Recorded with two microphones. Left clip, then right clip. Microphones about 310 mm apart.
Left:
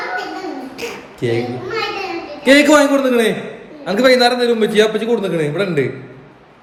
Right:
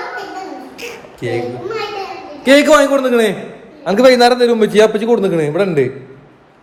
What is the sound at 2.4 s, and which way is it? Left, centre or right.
A man's voice, centre.